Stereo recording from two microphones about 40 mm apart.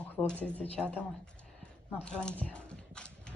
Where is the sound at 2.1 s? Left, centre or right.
Left.